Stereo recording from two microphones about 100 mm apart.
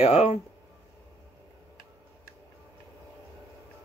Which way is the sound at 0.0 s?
85° left.